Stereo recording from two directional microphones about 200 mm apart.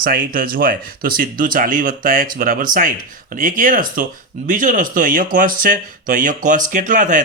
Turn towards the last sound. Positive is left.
turn(degrees=-40)  # may be behind; listen again after turning